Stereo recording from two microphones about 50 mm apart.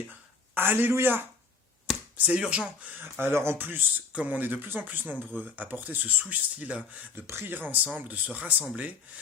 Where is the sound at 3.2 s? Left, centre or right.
Right.